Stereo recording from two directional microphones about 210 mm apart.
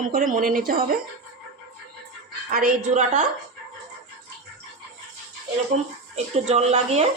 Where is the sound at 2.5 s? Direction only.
40° right (ahead or behind).